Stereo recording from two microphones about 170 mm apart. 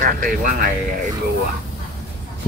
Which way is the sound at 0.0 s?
50° right (ahead or behind).